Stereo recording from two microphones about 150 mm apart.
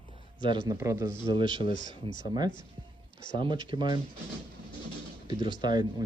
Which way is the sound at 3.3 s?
30° right (ahead or behind).